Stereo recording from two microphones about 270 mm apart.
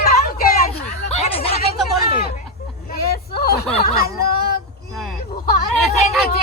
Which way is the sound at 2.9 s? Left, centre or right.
Left.